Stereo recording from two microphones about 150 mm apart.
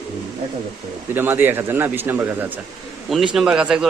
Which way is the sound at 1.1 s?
15° right (ahead or behind).